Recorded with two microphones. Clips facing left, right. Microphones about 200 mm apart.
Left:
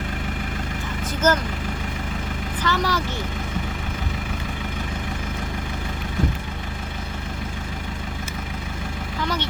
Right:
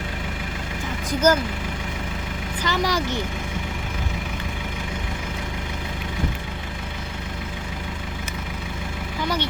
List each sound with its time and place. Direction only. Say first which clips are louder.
1.2 s speech: right 2 dB; 10° right (ahead or behind)
2.6 s speech: even; 15° right (ahead or behind)